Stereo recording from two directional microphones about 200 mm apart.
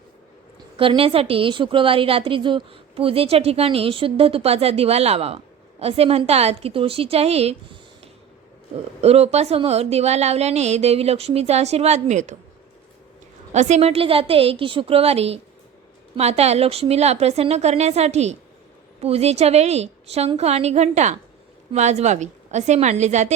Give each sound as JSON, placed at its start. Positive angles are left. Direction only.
{"t": 0.8, "sound": "a woman's voice", "side_deg": -25}
{"t": 13.5, "sound": "a woman's voice", "side_deg": -35}